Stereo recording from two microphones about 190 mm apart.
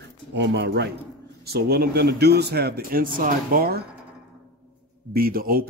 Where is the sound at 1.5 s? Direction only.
55° right (ahead or behind).